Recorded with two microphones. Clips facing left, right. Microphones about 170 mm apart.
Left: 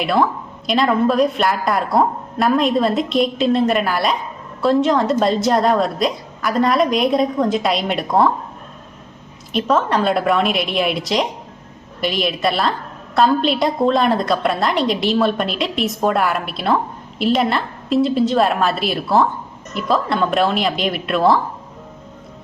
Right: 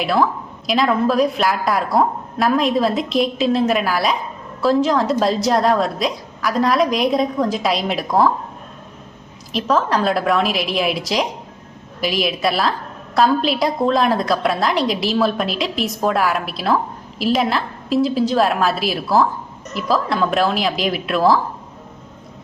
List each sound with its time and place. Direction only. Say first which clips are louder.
0.0 s a woman's voice: even; centre (ahead or behind)
9.5 s a woman's voice: left 1 dB; centre (ahead or behind)